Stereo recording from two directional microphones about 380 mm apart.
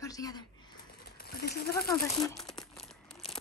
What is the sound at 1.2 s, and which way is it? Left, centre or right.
Speech, left.